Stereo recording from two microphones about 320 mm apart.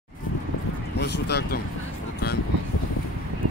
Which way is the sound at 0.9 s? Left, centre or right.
Left.